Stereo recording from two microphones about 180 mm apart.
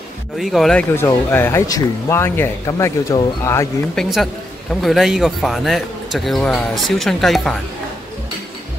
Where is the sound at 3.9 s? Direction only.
Centre (ahead or behind).